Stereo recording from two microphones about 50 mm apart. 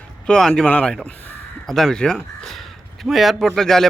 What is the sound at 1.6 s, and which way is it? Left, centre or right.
Speech, centre.